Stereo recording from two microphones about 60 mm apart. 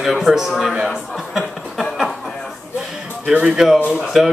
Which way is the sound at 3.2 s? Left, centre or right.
Centre.